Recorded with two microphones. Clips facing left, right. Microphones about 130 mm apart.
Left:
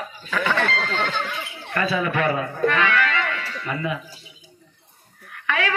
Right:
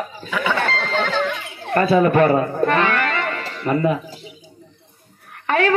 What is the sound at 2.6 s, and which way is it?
Music, 40° right (ahead or behind).